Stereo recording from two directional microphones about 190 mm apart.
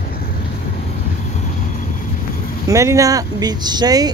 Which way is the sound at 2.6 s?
15° right (ahead or behind).